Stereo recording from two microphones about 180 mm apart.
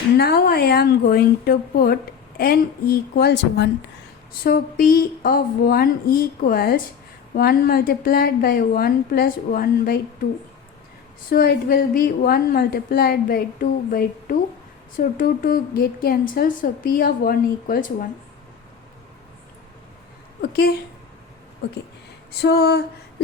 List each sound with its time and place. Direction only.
0.2 s a woman's voice: 60° left (ahead or behind)
4.4 s a woman's voice: 55° left (ahead or behind)
11.3 s a woman's voice: 55° left (ahead or behind)
20.4 s a woman's voice: 60° left (ahead or behind)
22.3 s a woman's voice: 65° left (ahead or behind)